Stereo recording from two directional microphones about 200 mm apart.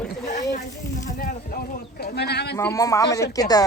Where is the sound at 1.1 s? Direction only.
45° left (ahead or behind).